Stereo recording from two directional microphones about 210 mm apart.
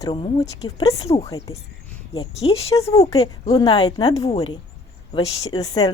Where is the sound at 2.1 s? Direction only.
25° left (ahead or behind).